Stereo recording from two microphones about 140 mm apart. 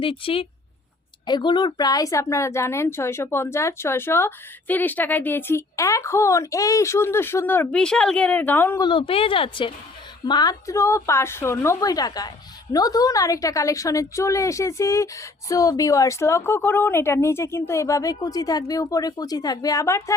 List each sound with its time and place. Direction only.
0.0 s a woman's voice: 40° left (ahead or behind); by 8.8 s 15° left (ahead or behind)
8.8 s a woman's voice: 35° left (ahead or behind)